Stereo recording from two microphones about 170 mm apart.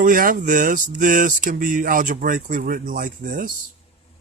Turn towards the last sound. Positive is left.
turn(degrees=-50)  # may be behind; listen again after turning